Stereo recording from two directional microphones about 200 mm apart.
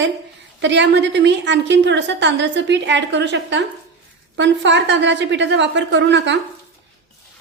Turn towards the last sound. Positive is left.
turn(degrees=-60)  # may be behind; listen again after turning